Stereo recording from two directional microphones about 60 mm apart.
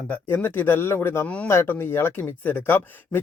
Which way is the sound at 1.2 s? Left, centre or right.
Left.